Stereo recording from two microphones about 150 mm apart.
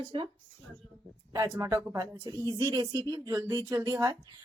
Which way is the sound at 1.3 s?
20° right (ahead or behind).